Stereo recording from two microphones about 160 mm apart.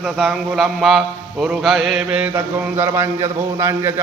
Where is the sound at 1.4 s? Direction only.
Centre (ahead or behind).